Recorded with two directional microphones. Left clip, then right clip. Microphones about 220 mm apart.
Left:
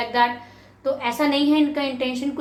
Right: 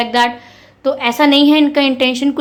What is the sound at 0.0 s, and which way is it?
A woman's voice, 45° right (ahead or behind).